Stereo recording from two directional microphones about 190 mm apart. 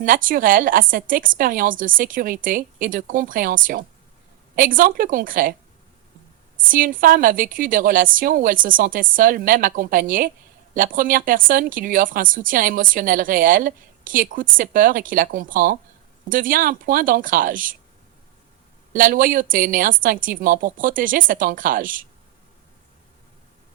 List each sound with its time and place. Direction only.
0.0 s a woman's voice: 45° right (ahead or behind)
6.7 s a woman's voice: 45° right (ahead or behind)
18.9 s a woman's voice: 45° right (ahead or behind)